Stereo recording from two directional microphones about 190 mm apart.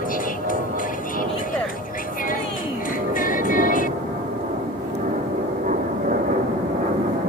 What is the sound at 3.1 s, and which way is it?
Music, 45° left (ahead or behind).